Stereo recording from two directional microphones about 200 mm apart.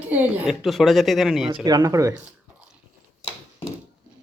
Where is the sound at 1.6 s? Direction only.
20° right (ahead or behind).